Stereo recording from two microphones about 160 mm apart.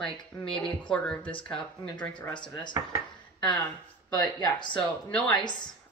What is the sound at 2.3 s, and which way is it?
Speech, 30° left (ahead or behind).